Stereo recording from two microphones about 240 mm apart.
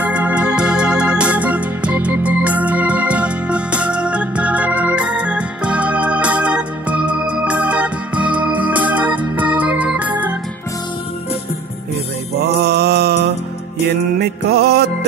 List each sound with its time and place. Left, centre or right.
0.0 s organ: centre
12.6 s mantra: right
14.1 s music: right